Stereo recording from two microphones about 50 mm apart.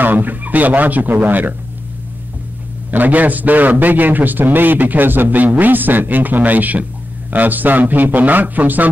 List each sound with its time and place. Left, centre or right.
0.0 s a man's voice: right
2.9 s a man's voice: right